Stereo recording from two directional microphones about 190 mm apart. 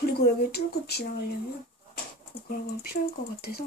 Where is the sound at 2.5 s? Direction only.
55° left (ahead or behind).